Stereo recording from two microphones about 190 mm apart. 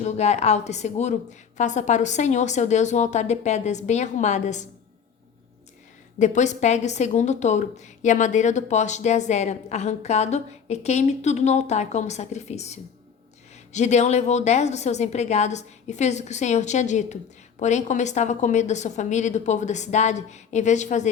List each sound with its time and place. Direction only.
0.0 s a woman's voice: 35° left (ahead or behind)
6.1 s a woman's voice: 40° left (ahead or behind)